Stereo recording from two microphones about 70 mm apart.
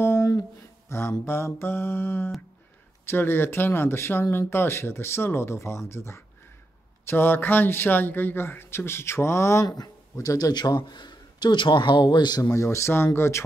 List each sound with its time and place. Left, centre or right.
0.0 s a sound: left
0.9 s speech: left
9.7 s speech: left
12.4 s speech: left